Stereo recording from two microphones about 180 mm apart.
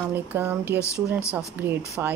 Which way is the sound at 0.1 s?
10° right (ahead or behind).